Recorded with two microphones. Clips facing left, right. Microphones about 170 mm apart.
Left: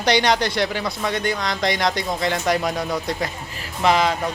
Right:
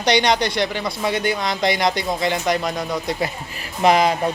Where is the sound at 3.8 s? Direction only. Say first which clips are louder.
Right 3 dB; 15° right (ahead or behind).